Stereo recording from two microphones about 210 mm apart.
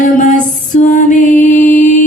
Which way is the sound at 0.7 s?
35° left (ahead or behind).